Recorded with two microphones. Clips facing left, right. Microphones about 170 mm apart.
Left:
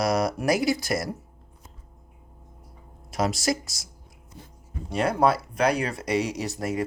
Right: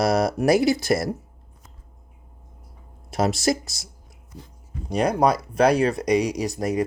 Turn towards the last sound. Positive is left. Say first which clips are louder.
# right 4 dB
turn(degrees=-15)  # may be behind; listen again after turning